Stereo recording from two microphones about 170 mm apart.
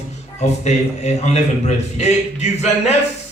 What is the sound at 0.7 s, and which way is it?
Speech, 40° left (ahead or behind).